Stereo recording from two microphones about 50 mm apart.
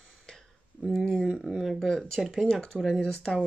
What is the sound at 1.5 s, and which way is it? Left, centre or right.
Speech, centre.